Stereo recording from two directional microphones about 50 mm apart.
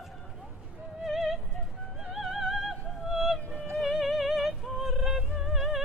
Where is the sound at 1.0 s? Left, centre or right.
Centre.